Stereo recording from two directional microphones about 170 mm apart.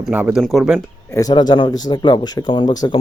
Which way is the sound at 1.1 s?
25° left (ahead or behind).